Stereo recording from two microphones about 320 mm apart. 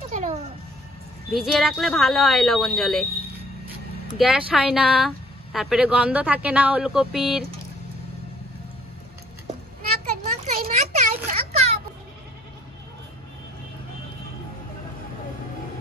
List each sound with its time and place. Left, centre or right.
0.1 s music: right
1.3 s speech: centre
4.2 s speech: centre
10.4 s a sound: right